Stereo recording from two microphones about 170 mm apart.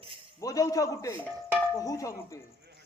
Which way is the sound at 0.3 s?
20° left (ahead or behind).